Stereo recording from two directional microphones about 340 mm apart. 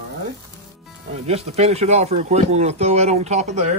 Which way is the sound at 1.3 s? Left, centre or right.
Centre.